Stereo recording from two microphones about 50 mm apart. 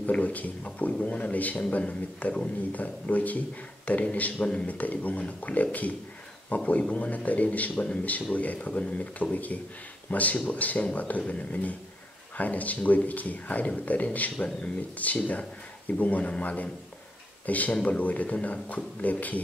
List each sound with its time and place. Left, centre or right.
0.0 s speech: left
4.6 s speech: left